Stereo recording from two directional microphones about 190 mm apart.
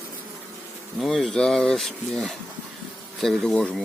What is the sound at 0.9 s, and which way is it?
Speech, centre (ahead or behind).